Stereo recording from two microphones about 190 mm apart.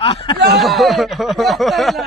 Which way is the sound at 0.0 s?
30° left (ahead or behind).